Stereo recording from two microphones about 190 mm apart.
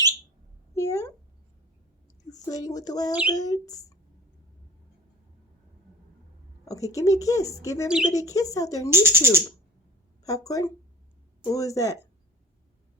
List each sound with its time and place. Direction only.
0.8 s a sound: 15° left (ahead or behind)
2.3 s speech: 20° left (ahead or behind)
6.7 s a woman's voice: 15° left (ahead or behind)
8.9 s speech: 15° right (ahead or behind)
10.2 s a woman's voice: 20° left (ahead or behind)